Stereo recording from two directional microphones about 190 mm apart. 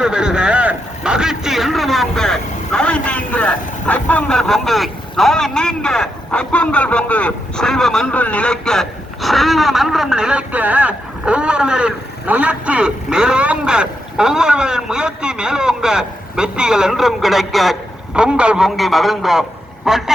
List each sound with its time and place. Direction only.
0.0 s a man's voice: 5° right (ahead or behind)